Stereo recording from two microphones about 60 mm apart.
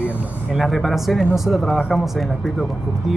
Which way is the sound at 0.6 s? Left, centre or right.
Centre.